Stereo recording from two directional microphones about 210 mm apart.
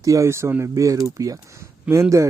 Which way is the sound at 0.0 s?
15° right (ahead or behind).